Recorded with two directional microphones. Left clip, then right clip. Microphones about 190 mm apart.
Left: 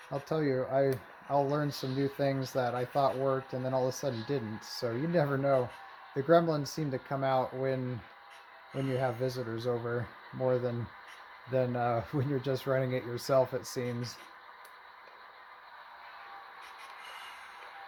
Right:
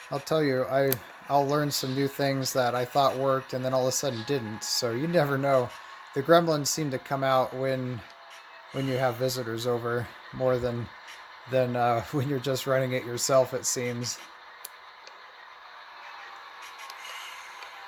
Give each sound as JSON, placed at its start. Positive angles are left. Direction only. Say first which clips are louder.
{"t": 0.1, "sound": "speech", "louder": "right 6 dB", "side_deg": -25}